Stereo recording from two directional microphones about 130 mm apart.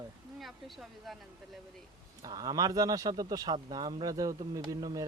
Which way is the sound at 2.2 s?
30° right (ahead or behind).